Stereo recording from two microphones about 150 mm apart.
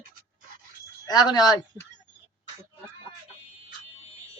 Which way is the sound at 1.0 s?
25° left (ahead or behind).